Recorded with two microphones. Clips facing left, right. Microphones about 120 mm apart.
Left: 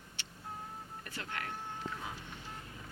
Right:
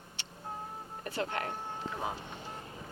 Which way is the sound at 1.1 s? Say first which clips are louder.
Right 7 dB; 25° right (ahead or behind).